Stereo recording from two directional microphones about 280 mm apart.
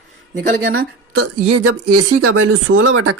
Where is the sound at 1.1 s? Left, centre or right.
Right.